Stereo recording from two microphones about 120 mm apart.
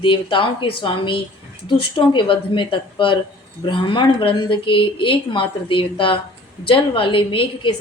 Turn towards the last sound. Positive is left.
turn(degrees=45)  # may be behind; listen again after turning